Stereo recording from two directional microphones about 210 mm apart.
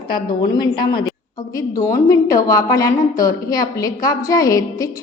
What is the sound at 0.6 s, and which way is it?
A woman's voice, 20° left (ahead or behind).